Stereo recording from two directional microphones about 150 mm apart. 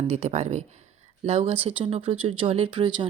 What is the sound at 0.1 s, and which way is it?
Speech, 50° right (ahead or behind).